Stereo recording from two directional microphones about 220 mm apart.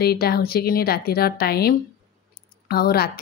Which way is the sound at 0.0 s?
45° left (ahead or behind).